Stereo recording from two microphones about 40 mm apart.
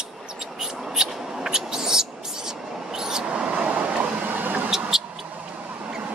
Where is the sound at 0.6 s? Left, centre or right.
Centre.